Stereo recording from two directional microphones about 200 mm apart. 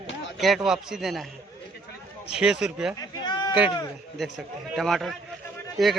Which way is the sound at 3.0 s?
20° left (ahead or behind).